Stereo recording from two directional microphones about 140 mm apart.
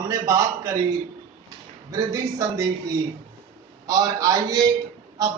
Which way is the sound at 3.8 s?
25° right (ahead or behind).